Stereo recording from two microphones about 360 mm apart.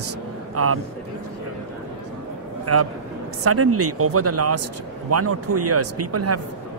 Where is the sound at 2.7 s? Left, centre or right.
Right.